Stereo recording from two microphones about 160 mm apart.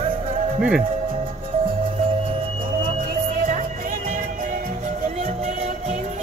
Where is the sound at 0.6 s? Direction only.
5° right (ahead or behind).